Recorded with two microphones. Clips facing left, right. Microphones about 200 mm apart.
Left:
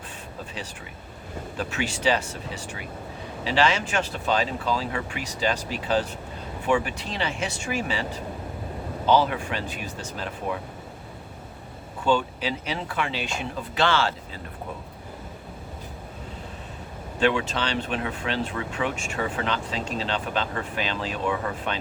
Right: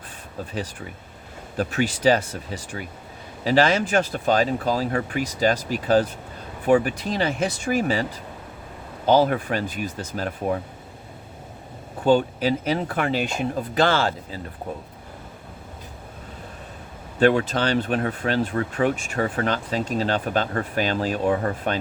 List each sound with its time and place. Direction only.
1.5 s speech: 40° right (ahead or behind)
9.0 s speech: 45° right (ahead or behind)
12.0 s speech: 45° right (ahead or behind)
17.2 s speech: 45° right (ahead or behind)